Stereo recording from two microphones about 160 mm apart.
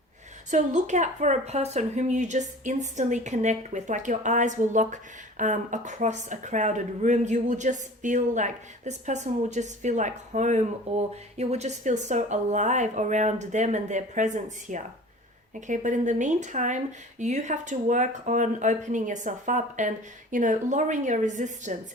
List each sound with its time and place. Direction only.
0.5 s a woman's voice: 50° right (ahead or behind)